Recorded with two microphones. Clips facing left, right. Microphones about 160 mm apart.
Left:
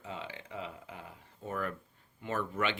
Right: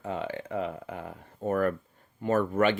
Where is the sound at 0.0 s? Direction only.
55° right (ahead or behind).